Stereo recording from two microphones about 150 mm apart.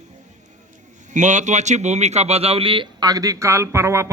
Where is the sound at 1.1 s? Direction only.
55° right (ahead or behind).